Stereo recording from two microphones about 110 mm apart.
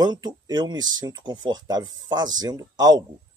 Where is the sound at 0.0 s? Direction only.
40° right (ahead or behind).